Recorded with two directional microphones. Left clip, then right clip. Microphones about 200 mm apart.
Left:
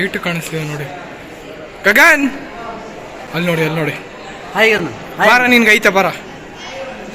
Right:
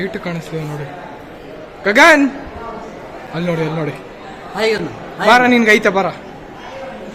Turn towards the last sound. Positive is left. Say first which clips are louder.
# left 2 dB
turn(degrees=-5)  # may be behind; listen again after turning